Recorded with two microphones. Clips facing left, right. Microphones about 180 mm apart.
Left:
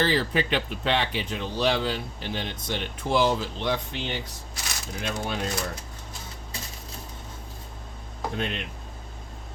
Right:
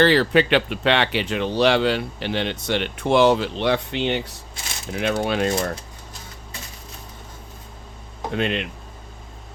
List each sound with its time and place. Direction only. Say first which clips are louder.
0.0 s speech: right 8 dB; 75° right (ahead or behind)
8.3 s speech: right 8 dB; 75° right (ahead or behind)